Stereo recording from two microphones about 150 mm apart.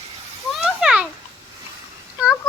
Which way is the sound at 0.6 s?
5° right (ahead or behind).